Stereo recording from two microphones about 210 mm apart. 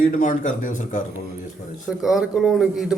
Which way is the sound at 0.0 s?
35° left (ahead or behind).